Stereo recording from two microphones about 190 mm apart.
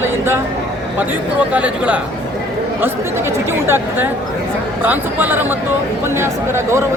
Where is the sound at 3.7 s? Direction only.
10° right (ahead or behind).